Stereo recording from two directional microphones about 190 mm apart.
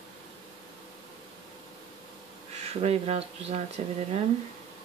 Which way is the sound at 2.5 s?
35° right (ahead or behind).